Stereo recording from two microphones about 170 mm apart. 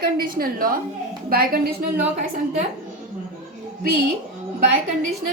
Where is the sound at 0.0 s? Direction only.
60° right (ahead or behind).